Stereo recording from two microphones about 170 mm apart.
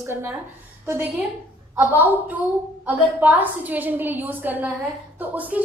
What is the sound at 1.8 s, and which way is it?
A woman's voice, 10° right (ahead or behind).